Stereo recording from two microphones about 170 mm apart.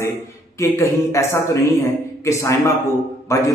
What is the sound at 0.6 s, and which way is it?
A man's voice, 15° left (ahead or behind).